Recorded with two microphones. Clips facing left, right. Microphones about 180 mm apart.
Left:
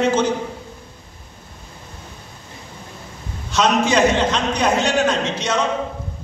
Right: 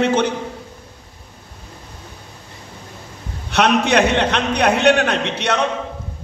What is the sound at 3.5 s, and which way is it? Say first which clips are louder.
A man's voice: right 1 dB; 65° right (ahead or behind).